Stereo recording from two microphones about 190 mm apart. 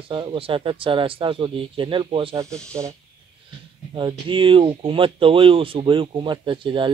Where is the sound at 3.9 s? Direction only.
25° right (ahead or behind).